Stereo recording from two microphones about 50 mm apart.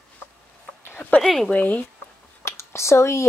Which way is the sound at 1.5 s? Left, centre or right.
Left.